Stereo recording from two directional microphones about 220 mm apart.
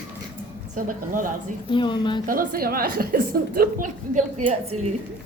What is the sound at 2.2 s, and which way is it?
A woman's voice, 40° right (ahead or behind).